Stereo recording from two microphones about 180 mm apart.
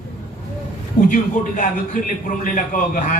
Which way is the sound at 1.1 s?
45° left (ahead or behind).